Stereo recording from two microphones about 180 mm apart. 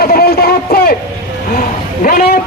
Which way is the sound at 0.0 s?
60° left (ahead or behind).